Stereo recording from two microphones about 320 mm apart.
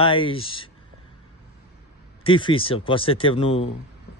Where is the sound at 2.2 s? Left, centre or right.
Centre.